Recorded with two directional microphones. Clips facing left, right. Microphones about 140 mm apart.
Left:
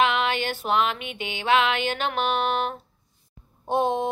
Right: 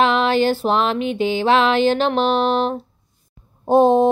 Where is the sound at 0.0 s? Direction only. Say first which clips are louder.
Right 7 dB; 35° right (ahead or behind).